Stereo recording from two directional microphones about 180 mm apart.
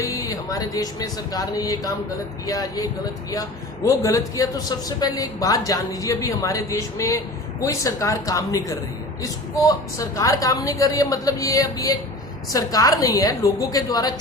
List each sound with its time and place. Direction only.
0.0 s a man's voice: 20° left (ahead or behind)